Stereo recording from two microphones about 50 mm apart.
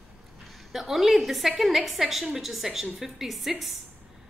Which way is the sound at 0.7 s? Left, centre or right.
Centre.